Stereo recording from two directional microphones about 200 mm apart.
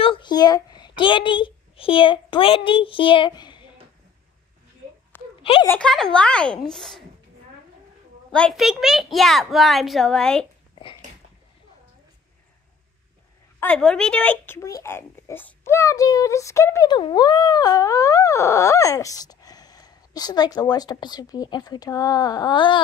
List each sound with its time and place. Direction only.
0.0 s a child's voice: 25° left (ahead or behind)
5.4 s speech: 25° left (ahead or behind)
5.7 s a child's voice: 5° left (ahead or behind)
8.3 s a child's voice: 5° left (ahead or behind)
10.7 s a sound: 25° left (ahead or behind)
13.6 s speech: 5° left (ahead or behind); by 22.8 s 25° left (ahead or behind)